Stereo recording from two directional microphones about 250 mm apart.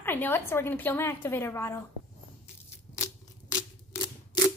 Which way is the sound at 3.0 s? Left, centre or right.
Centre.